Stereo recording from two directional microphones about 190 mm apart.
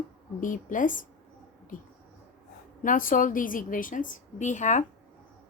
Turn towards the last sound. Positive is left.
turn(degrees=40)  # may be behind; listen again after turning